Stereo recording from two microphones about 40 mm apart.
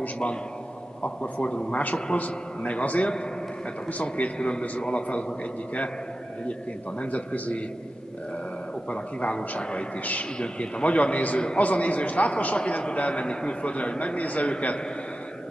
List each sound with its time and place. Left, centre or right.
1.0 s a man's voice: left
7.0 s a man's voice: left
8.8 s a man's voice: left